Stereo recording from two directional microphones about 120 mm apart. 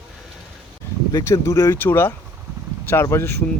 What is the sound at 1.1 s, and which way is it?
Speech, 25° left (ahead or behind).